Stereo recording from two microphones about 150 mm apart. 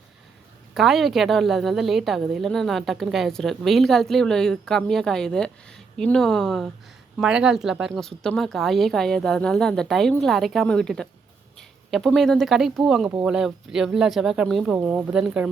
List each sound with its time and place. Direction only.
0.7 s a woman's voice: centre (ahead or behind)